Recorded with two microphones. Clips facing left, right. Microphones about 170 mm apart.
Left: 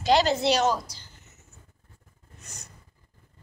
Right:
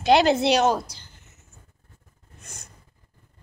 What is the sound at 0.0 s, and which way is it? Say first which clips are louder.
Speech: right 4 dB; 60° right (ahead or behind).